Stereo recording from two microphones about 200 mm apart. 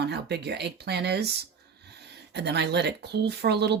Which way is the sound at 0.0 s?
55° right (ahead or behind).